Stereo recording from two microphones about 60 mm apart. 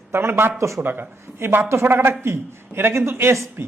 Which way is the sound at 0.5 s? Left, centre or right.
Right.